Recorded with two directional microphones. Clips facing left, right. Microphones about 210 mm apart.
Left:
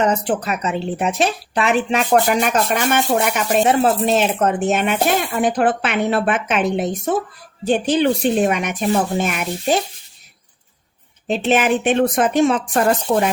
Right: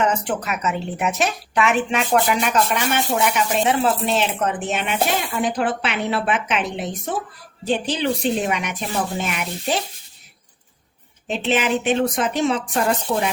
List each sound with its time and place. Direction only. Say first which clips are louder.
0.0 s speech: left 3 dB; 35° left (ahead or behind)
11.3 s speech: left 4 dB; 45° left (ahead or behind)